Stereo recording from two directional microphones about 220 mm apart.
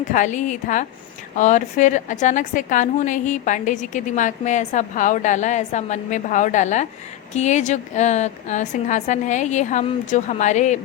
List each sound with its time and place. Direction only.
0.0 s a woman's voice: 35° left (ahead or behind)